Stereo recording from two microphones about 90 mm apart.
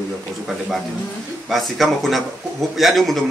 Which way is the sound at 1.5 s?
Centre (ahead or behind).